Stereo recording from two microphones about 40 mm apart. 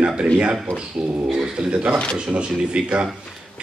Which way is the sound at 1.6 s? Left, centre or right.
Right.